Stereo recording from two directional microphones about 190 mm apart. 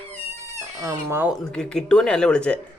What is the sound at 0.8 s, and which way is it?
Speech, 15° right (ahead or behind).